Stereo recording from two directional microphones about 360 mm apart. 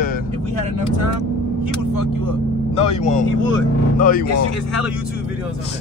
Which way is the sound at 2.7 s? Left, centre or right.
Centre.